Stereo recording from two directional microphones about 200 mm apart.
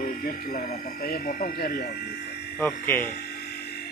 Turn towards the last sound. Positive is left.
turn(degrees=55)  # may be behind; listen again after turning